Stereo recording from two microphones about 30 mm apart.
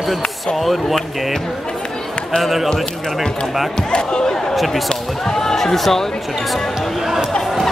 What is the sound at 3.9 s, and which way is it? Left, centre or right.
Speech, left.